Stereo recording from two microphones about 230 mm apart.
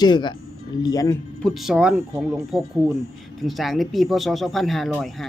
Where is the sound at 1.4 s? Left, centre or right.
Centre.